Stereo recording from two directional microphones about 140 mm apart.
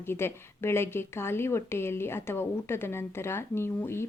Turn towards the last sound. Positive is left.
turn(degrees=15)  # may be behind; listen again after turning